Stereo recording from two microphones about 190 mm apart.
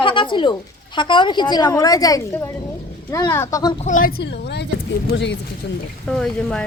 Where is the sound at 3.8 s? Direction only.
45° left (ahead or behind).